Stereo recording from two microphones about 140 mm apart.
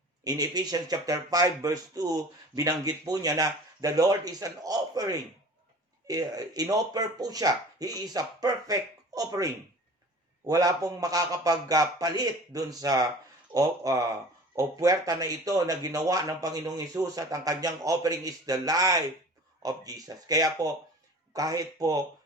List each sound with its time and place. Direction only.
0.3 s speech: 25° right (ahead or behind)